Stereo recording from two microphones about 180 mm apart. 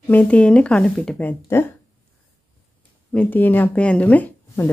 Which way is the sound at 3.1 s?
10° left (ahead or behind).